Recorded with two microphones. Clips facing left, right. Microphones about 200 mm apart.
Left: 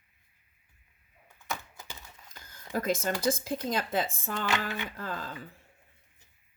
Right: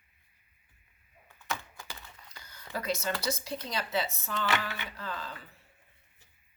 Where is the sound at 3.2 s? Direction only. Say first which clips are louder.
Left 6 dB; 50° left (ahead or behind).